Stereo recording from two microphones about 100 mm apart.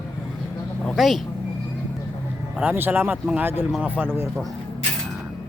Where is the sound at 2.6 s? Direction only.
20° right (ahead or behind).